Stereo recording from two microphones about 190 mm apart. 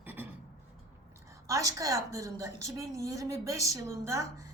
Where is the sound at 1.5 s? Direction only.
15° right (ahead or behind).